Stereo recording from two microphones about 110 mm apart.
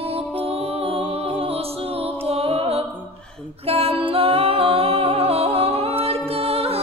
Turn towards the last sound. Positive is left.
turn(degrees=-65)  # may be behind; listen again after turning